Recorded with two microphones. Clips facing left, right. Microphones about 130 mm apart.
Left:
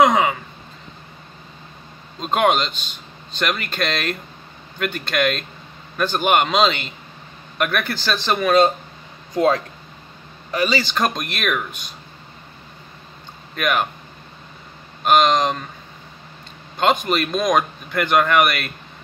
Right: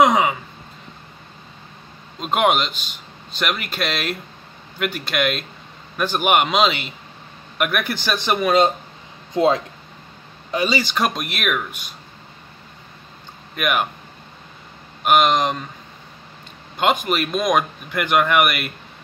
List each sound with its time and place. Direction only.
0.0 s a sound: 5° right (ahead or behind)
2.1 s speech: 5° right (ahead or behind)
10.5 s speech: 15° right (ahead or behind)
13.6 s speech: 10° right (ahead or behind)
15.0 s speech: 10° right (ahead or behind)
16.7 s speech: 10° right (ahead or behind)